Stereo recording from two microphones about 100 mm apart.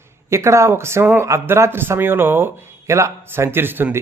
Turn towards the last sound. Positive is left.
turn(degrees=-20)  # may be behind; listen again after turning